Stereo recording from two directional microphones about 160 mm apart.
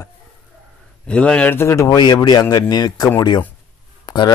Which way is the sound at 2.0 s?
25° left (ahead or behind).